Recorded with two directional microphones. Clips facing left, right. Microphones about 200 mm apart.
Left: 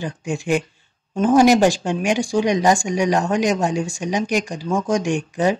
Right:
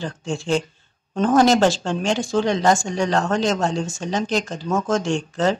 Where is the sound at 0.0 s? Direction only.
15° left (ahead or behind).